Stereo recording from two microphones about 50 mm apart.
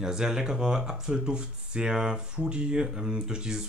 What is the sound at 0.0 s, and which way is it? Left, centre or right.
Speech, centre.